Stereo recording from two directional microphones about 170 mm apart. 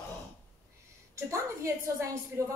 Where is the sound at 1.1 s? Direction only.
15° right (ahead or behind).